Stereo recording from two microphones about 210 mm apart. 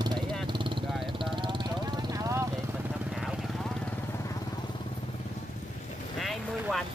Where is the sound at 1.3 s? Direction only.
20° right (ahead or behind).